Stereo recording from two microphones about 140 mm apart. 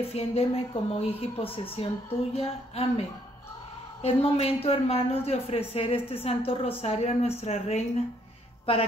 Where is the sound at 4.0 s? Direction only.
45° left (ahead or behind).